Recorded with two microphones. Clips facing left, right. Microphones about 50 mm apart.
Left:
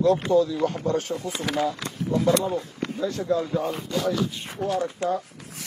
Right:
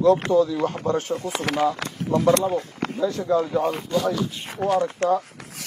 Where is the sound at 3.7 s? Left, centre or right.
Right.